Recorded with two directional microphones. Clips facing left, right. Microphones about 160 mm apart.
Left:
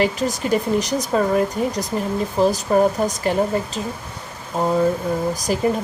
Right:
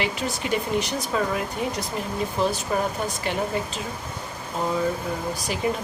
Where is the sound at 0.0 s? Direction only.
40° left (ahead or behind).